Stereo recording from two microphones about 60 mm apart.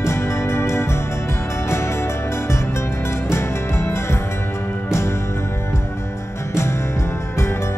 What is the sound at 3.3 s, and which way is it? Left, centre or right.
Music, left.